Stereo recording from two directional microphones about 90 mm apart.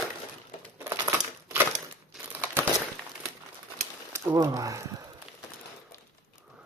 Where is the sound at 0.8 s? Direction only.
35° right (ahead or behind).